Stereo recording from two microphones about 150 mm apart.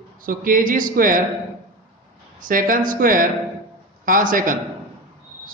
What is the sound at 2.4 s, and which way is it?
A man's voice, 65° right (ahead or behind).